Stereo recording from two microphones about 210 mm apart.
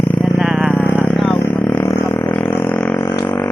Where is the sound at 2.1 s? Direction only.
20° left (ahead or behind).